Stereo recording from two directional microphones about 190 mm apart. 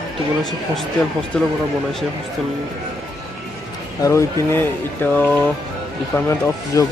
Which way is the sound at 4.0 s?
15° left (ahead or behind).